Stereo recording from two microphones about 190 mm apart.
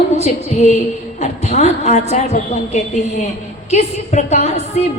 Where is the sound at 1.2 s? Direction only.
35° left (ahead or behind).